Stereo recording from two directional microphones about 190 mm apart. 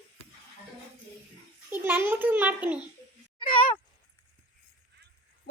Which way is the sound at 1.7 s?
10° right (ahead or behind).